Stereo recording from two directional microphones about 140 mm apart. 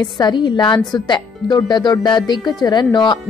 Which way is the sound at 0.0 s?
30° left (ahead or behind).